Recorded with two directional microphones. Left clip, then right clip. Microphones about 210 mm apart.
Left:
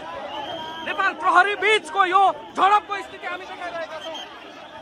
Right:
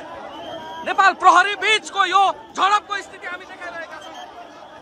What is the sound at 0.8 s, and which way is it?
Speech, 15° right (ahead or behind).